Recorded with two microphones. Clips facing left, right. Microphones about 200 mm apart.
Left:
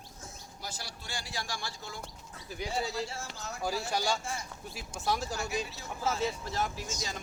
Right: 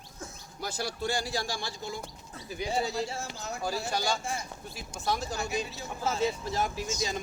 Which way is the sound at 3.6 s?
10° left (ahead or behind).